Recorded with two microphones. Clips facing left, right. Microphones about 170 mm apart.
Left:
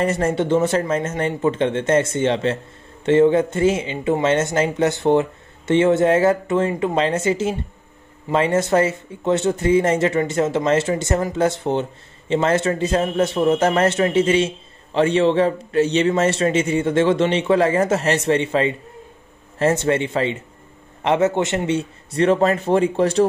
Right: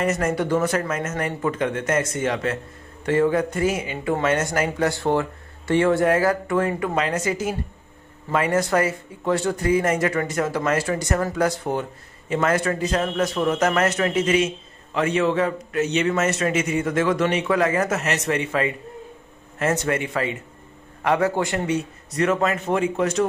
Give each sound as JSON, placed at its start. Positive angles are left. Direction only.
{"t": 0.0, "sound": "speech", "side_deg": 30}